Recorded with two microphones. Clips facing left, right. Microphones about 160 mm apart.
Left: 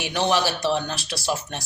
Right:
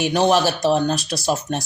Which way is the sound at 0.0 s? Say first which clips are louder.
Right 6 dB; 50° right (ahead or behind).